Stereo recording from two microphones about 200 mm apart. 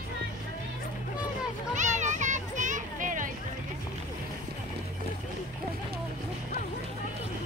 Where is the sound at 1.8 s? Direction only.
35° right (ahead or behind).